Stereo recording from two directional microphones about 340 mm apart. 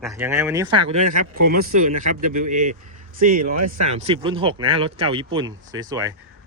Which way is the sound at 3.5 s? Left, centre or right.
Right.